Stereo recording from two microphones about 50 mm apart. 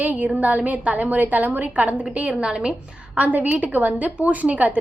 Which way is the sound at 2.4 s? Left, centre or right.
Centre.